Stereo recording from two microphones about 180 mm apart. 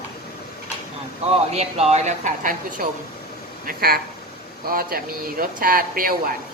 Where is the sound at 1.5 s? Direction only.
35° right (ahead or behind); by 3.9 s 55° right (ahead or behind).